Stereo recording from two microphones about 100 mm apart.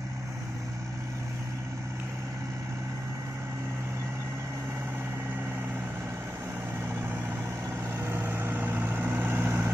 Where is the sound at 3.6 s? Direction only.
25° right (ahead or behind).